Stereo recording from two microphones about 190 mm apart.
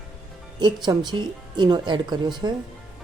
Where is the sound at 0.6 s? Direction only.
20° right (ahead or behind).